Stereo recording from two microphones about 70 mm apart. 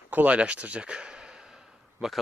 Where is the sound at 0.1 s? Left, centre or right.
Right.